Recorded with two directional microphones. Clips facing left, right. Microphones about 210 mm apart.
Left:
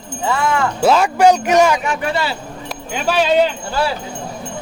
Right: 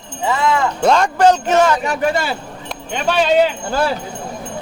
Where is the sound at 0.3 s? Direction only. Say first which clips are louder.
Right 1 dB; 20° right (ahead or behind).